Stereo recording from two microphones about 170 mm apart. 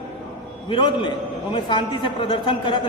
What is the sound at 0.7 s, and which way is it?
A man's voice, 30° left (ahead or behind).